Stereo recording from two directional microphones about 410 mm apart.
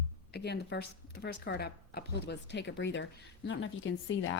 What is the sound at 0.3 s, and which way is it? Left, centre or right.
Speech, left.